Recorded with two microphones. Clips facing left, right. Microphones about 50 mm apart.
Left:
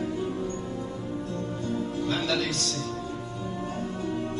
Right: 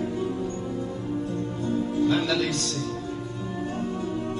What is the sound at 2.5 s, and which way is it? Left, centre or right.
Music, centre.